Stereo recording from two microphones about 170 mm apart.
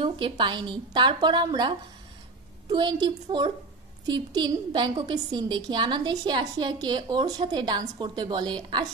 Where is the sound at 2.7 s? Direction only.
25° right (ahead or behind).